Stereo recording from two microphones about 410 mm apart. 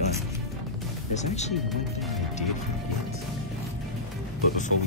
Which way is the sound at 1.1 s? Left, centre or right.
Centre.